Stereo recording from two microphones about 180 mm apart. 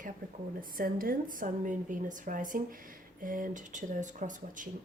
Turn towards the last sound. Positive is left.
turn(degrees=-45)  # may be behind; listen again after turning